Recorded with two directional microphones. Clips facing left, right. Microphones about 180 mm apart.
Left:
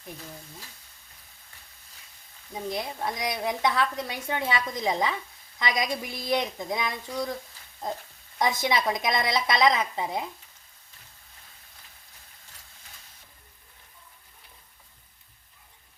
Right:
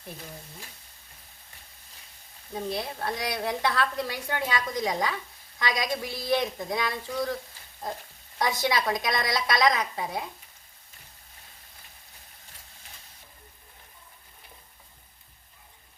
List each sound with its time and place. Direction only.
2.7 s a woman's voice: 20° left (ahead or behind)
8.4 s a woman's voice: 20° left (ahead or behind)